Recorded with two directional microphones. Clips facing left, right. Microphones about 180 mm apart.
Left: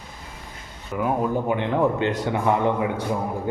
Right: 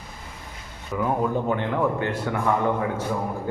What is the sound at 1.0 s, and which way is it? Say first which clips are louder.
A man's voice: left 1 dB; 15° left (ahead or behind).